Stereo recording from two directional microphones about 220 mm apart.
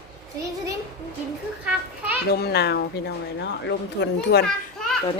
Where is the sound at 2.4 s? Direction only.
50° left (ahead or behind).